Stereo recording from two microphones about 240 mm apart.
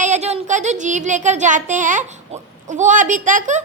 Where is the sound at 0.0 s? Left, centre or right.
Right.